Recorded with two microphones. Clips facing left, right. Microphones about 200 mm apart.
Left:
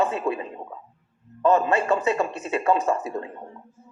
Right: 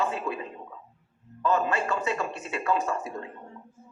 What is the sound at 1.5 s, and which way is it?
A woman's voice, 25° left (ahead or behind).